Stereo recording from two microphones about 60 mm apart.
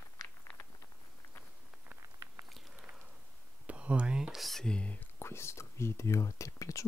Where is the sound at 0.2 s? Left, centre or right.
Left.